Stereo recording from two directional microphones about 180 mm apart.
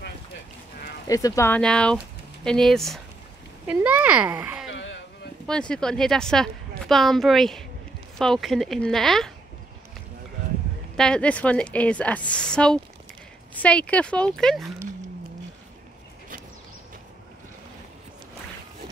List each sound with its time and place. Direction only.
1.0 s a woman's voice: 20° left (ahead or behind); by 4.6 s 10° right (ahead or behind)
4.6 s a sound: 90° left
5.5 s a woman's voice: 5° left (ahead or behind)
11.0 s a woman's voice: 5° left (ahead or behind)